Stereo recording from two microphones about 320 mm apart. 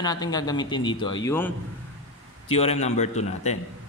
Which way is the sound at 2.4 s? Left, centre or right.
Centre.